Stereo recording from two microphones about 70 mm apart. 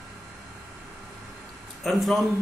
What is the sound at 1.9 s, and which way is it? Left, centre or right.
Speech, centre.